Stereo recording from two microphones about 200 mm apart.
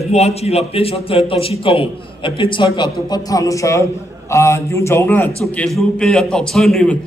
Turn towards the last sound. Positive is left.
turn(degrees=0)  # may be behind; listen again after turning